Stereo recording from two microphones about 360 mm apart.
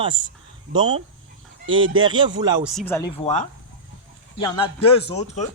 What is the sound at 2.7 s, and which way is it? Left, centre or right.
Speech, centre.